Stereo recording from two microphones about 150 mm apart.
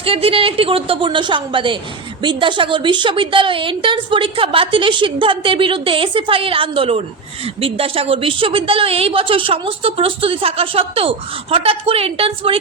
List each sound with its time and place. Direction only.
0.0 s a woman's voice: 40° right (ahead or behind)